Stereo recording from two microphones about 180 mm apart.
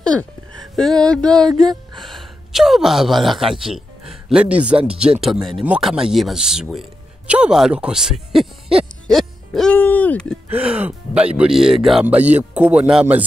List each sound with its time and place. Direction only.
0.0 s speech: 5° left (ahead or behind)
1.5 s speech: 25° right (ahead or behind)
2.0 s speech: centre (ahead or behind)
10.7 s speech: 5° right (ahead or behind)